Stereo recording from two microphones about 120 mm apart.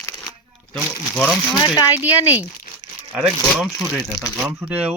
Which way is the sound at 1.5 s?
35° left (ahead or behind).